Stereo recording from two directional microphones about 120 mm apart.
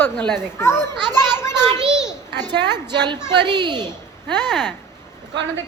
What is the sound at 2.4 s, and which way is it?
A woman's voice, 35° right (ahead or behind).